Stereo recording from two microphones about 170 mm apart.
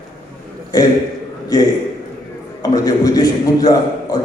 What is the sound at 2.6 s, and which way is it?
A man's voice, 20° left (ahead or behind).